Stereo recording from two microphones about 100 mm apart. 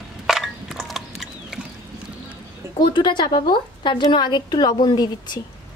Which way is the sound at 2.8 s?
50° left (ahead or behind).